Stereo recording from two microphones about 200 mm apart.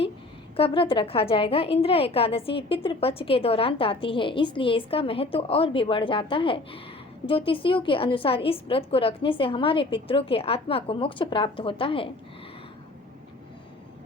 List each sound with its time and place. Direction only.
0.5 s a woman's voice: 25° left (ahead or behind)